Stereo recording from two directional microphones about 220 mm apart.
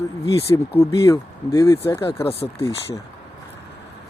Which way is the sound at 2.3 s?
25° left (ahead or behind).